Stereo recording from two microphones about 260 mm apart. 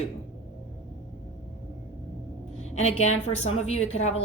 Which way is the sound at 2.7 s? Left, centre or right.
Left.